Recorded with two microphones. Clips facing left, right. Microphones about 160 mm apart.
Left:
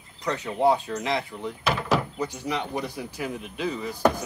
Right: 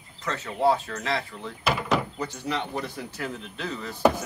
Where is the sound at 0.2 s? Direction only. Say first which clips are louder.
Left 2 dB; 15° left (ahead or behind).